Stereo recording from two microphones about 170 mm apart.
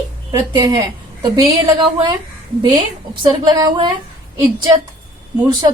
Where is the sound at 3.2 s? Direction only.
25° right (ahead or behind).